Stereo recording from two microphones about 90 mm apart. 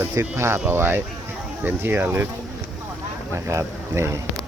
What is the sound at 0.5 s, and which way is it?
Speech, 20° right (ahead or behind).